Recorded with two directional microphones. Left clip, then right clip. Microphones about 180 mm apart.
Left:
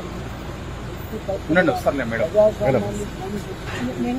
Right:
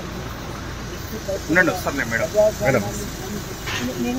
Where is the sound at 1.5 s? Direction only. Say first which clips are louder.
Even; 55° left (ahead or behind).